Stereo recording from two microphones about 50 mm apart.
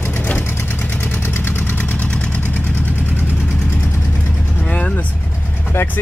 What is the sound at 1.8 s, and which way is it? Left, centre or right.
Engine, left.